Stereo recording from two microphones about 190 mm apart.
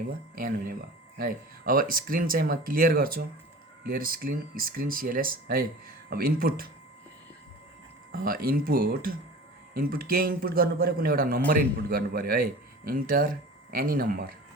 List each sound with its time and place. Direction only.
0.3 s a man's voice: 50° right (ahead or behind)
8.1 s a man's voice: 50° right (ahead or behind)